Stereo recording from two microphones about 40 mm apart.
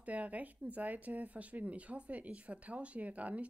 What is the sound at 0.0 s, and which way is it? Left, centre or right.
Speech, right.